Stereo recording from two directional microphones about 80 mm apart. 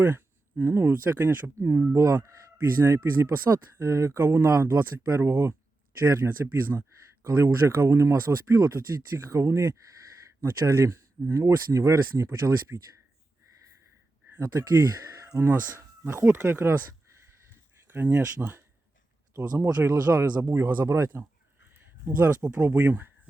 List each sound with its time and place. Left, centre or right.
0.0 s speech: right
2.0 s speech: right
14.8 s a sound: right
15.4 s speech: right
17.8 s speech: right
20.8 s speech: right
22.4 s speech: centre